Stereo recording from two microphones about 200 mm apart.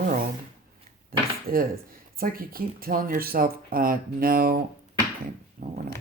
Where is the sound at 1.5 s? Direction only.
45° right (ahead or behind).